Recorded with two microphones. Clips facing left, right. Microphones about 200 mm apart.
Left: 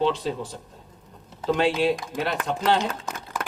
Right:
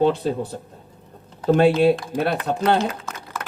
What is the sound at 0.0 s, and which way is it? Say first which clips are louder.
Speech: right 5 dB; 55° right (ahead or behind).